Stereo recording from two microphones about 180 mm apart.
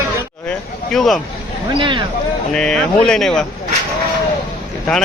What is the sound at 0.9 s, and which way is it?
Speech, centre (ahead or behind).